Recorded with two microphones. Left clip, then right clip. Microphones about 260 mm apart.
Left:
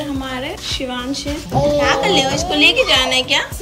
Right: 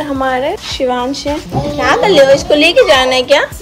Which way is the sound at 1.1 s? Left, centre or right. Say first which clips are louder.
Right 4 dB; centre.